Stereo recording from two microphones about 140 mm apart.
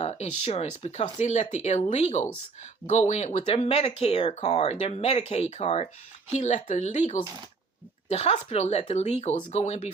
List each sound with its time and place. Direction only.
0.0 s speech: 50° left (ahead or behind)